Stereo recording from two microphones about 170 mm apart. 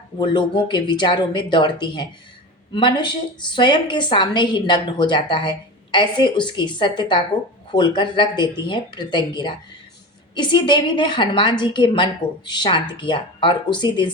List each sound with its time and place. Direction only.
0.2 s a woman's voice: 25° left (ahead or behind)